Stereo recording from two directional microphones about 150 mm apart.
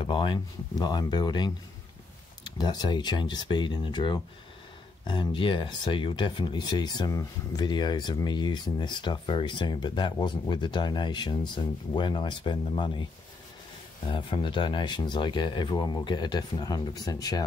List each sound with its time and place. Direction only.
0.0 s speech: 35° left (ahead or behind)
14.0 s speech: 35° left (ahead or behind)